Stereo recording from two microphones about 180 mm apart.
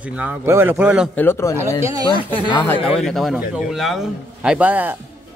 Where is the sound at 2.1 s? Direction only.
25° right (ahead or behind).